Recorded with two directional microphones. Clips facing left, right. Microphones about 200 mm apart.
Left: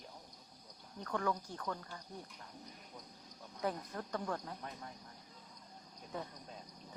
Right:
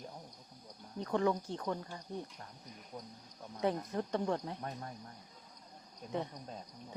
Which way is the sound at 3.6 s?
25° right (ahead or behind).